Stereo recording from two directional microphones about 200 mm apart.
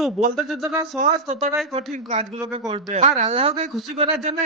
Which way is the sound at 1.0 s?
40° right (ahead or behind).